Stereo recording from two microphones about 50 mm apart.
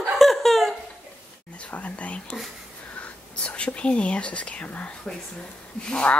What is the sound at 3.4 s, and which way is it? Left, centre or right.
Whispering, left.